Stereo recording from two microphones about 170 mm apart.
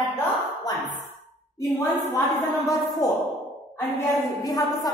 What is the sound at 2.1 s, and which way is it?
A woman's voice, 20° left (ahead or behind).